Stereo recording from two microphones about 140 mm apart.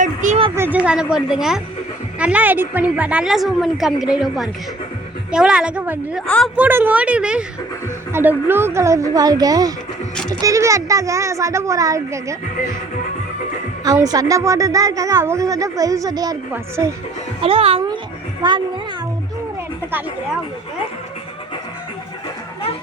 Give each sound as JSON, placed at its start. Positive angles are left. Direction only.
{"t": 0.0, "sound": "a sound", "side_deg": -60}
{"t": 0.5, "sound": "a woman's voice", "side_deg": -15}
{"t": 6.2, "sound": "a woman's voice", "side_deg": 5}
{"t": 6.6, "sound": "a woman's voice", "side_deg": -15}
{"t": 13.8, "sound": "a woman's voice", "side_deg": -25}
{"t": 17.4, "sound": "speech", "side_deg": -45}
{"t": 18.4, "sound": "a woman's voice", "side_deg": -30}